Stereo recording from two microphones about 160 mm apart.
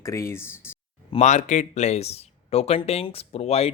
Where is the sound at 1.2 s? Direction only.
50° left (ahead or behind).